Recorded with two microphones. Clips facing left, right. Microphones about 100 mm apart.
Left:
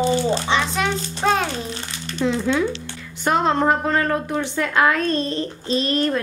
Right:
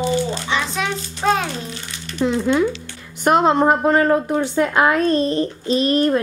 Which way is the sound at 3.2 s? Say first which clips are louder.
Right 4 dB; 15° right (ahead or behind).